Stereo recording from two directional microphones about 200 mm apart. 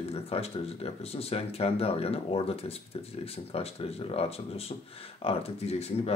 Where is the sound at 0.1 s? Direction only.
30° left (ahead or behind).